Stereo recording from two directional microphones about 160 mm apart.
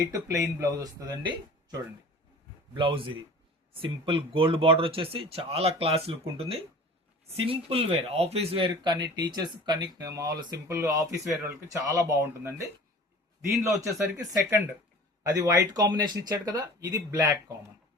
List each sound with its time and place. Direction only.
0.1 s speech: 20° right (ahead or behind)
2.7 s speech: 35° right (ahead or behind)
15.2 s speech: 20° right (ahead or behind)